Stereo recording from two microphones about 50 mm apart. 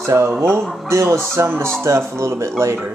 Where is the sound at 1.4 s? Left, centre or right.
Right.